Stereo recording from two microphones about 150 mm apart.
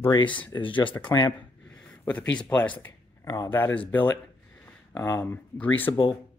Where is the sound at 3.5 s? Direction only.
15° left (ahead or behind).